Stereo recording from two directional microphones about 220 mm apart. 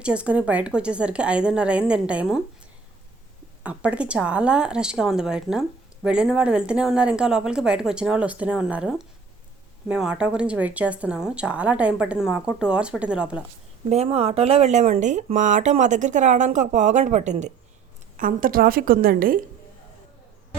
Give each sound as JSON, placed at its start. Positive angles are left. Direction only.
{"t": 0.0, "sound": "a woman's voice", "side_deg": -5}
{"t": 3.6, "sound": "a woman's voice", "side_deg": -5}
{"t": 13.9, "sound": "speech", "side_deg": -30}